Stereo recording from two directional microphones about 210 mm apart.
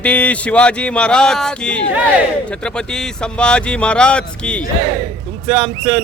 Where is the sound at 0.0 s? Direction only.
5° left (ahead or behind).